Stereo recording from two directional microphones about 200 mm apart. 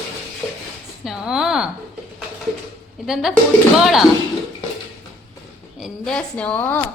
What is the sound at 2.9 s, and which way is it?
Speech, centre (ahead or behind).